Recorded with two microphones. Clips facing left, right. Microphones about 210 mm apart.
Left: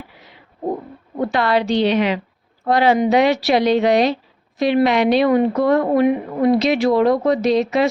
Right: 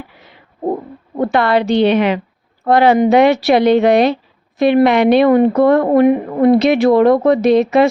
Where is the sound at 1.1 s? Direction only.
55° right (ahead or behind).